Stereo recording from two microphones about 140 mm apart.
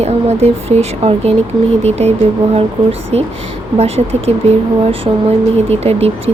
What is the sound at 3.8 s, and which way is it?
Speech, 50° right (ahead or behind).